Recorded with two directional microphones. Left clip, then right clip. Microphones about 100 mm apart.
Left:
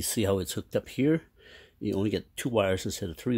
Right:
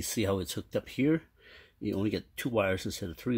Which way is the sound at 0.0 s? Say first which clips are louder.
Left 3 dB; 20° left (ahead or behind).